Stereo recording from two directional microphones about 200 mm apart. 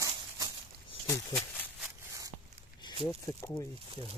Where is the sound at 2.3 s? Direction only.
10° right (ahead or behind).